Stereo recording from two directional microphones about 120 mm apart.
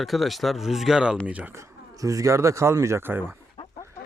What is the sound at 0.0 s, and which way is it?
Speech, centre (ahead or behind).